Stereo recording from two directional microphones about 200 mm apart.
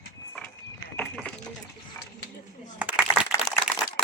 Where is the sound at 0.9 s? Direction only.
5° left (ahead or behind).